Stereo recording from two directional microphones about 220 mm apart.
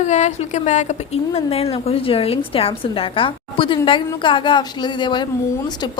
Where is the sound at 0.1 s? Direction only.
30° left (ahead or behind).